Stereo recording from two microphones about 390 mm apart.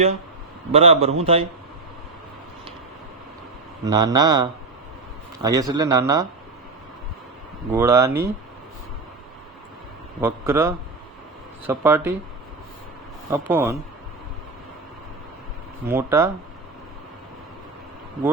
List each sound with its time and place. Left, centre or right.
0.7 s speech: centre
3.8 s speech: centre
7.7 s speech: centre
10.2 s speech: centre
13.3 s speech: centre
15.9 s speech: centre